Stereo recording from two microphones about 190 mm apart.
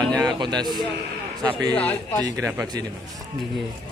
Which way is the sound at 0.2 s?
20° right (ahead or behind).